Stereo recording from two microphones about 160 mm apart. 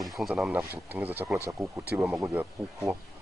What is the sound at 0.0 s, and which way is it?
Speech, centre (ahead or behind).